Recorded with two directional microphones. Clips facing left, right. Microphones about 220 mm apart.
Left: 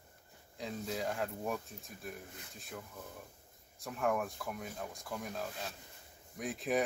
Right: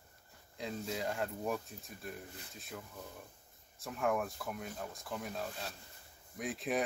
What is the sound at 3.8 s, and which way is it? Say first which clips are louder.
Speech: even; centre (ahead or behind).